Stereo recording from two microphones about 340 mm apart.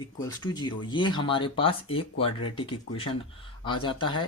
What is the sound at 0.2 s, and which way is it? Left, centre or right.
Speech, centre.